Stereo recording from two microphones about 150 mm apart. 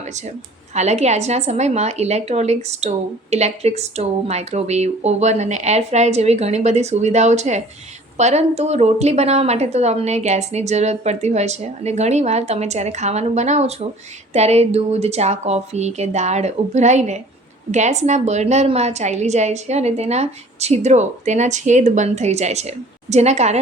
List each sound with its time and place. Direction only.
0.7 s a woman's voice: 50° right (ahead or behind)